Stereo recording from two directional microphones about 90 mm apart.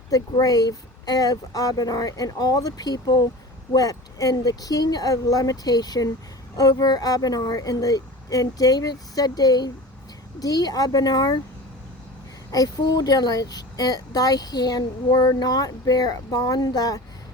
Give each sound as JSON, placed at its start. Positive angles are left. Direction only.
{"t": 0.1, "sound": "speech", "side_deg": 45}
{"t": 12.5, "sound": "speech", "side_deg": 45}